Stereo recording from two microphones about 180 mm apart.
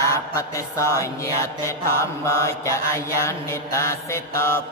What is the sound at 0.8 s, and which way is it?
Mantra, 15° left (ahead or behind).